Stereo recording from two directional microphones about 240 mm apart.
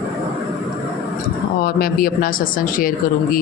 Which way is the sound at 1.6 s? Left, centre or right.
Left.